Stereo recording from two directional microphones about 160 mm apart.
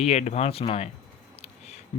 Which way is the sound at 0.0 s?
45° left (ahead or behind).